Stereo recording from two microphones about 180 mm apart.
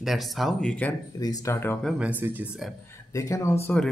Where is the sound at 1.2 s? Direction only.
20° left (ahead or behind).